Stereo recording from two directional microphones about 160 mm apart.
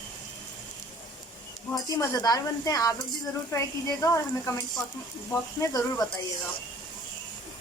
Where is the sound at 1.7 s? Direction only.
20° left (ahead or behind).